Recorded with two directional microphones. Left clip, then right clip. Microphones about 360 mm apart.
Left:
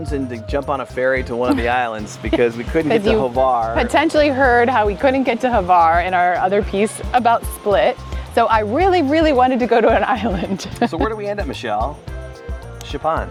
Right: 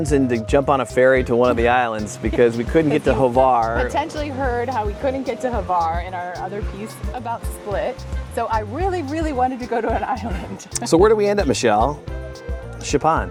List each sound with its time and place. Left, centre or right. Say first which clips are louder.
0.0 s speech: right 6 dB; right
2.4 s speech: right 3 dB; centre
3.2 s speech: right 1 dB; right
3.8 s a woman's voice: left 7 dB; left
8.4 s a woman's voice: left 8 dB; left
10.9 s speech: right 7 dB; right
12.9 s speech: right 2 dB; right